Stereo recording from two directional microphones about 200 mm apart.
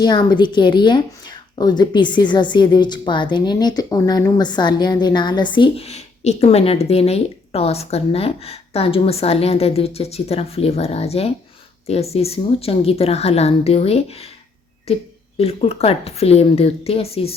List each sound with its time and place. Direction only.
0.0 s a woman's voice: 20° left (ahead or behind)